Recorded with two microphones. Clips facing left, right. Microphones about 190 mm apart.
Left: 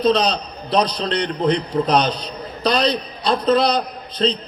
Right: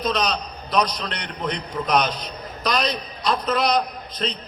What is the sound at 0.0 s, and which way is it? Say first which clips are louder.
A man's voice: left 6 dB; 30° left (ahead or behind).